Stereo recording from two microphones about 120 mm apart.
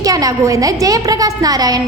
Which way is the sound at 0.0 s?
30° right (ahead or behind).